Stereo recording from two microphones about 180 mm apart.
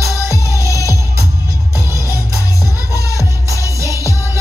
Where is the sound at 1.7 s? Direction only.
15° right (ahead or behind).